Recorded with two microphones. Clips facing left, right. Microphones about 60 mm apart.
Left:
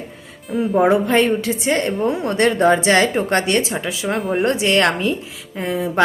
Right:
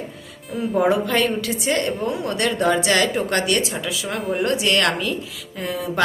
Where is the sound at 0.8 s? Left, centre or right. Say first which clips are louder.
Left 4 dB; left.